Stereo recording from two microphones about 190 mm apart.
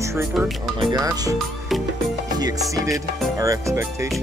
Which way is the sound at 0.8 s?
20° right (ahead or behind).